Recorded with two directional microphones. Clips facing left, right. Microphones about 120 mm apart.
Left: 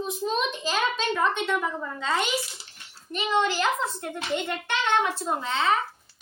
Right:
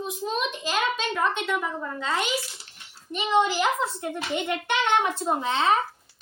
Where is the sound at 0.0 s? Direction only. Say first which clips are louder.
Left 1 dB; 10° right (ahead or behind).